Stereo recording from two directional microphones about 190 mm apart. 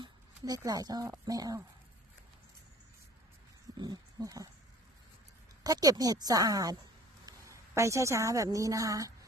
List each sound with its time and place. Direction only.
0.0 s a sound: 20° right (ahead or behind)
1.2 s speech: 20° right (ahead or behind)
3.8 s speech: 20° right (ahead or behind)
5.6 s speech: 20° right (ahead or behind)
7.3 s a sound: 15° right (ahead or behind)
7.8 s a woman's voice: 15° right (ahead or behind)